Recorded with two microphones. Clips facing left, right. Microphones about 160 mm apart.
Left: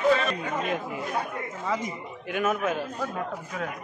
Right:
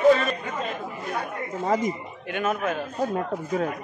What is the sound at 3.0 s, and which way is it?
Speech, 35° right (ahead or behind).